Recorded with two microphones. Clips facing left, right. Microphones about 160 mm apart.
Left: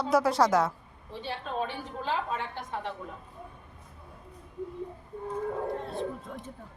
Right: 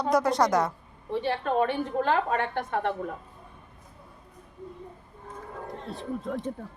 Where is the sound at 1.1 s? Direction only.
60° right (ahead or behind).